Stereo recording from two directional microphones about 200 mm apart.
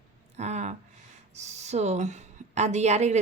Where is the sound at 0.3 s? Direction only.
35° right (ahead or behind).